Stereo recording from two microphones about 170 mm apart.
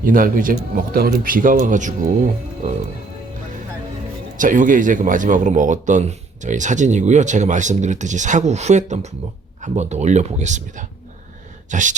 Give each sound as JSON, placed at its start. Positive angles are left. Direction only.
{"t": 0.0, "sound": "speech", "side_deg": -55}
{"t": 4.4, "sound": "speech", "side_deg": -50}